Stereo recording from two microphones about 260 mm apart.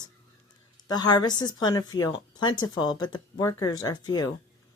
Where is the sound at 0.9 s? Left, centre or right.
Centre.